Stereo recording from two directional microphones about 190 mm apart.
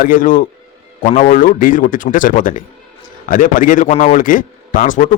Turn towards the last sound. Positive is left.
turn(degrees=40)  # may be behind; listen again after turning